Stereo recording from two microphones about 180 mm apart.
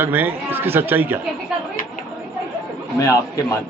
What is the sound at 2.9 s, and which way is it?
Speech, 15° left (ahead or behind).